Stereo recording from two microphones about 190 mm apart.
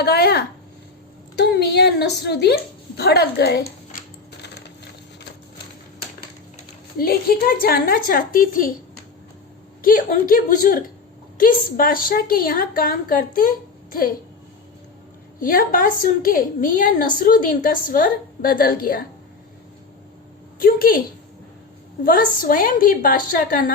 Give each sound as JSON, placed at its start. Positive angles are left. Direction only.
{"t": 0.0, "sound": "a woman's voice", "side_deg": 55}
{"t": 7.0, "sound": "a woman's voice", "side_deg": 50}
{"t": 9.8, "sound": "a woman's voice", "side_deg": 45}
{"t": 15.4, "sound": "a woman's voice", "side_deg": 45}
{"t": 20.6, "sound": "a woman's voice", "side_deg": 50}
{"t": 22.0, "sound": "a woman's voice", "side_deg": 50}